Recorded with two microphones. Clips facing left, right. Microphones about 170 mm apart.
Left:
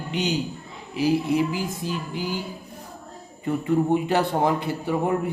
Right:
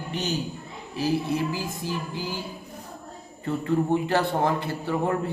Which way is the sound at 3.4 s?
15° left (ahead or behind).